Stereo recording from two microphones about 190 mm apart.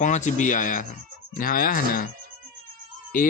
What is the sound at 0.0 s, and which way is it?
Speech, 40° left (ahead or behind).